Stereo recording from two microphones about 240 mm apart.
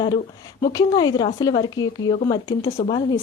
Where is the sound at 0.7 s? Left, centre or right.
Centre.